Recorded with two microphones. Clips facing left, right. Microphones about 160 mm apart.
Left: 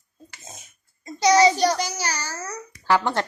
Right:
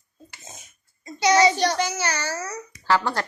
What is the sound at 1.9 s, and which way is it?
Speech, 35° left (ahead or behind).